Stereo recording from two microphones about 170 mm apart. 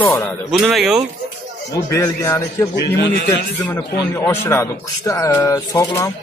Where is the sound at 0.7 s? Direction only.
Centre (ahead or behind).